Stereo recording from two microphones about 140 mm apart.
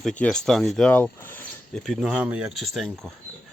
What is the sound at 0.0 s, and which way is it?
Speech, 5° left (ahead or behind).